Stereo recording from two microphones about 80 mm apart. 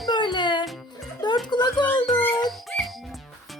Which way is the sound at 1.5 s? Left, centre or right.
Left.